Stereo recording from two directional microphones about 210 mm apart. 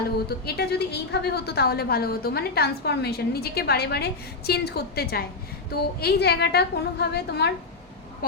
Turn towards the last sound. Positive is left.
turn(degrees=50)  # may be behind; listen again after turning